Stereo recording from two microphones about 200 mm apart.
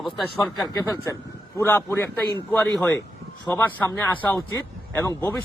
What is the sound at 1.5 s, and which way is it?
A man's voice, 10° left (ahead or behind).